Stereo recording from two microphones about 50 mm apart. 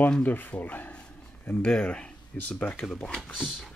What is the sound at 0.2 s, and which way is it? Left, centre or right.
Speech, left.